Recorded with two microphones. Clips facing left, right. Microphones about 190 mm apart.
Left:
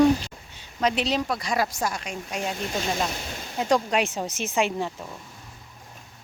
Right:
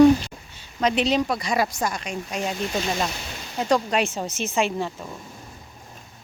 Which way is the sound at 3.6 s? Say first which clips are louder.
Right 1 dB; 10° left (ahead or behind).